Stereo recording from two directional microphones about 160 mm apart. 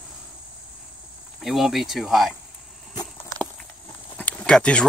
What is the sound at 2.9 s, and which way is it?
Walk, 25° left (ahead or behind).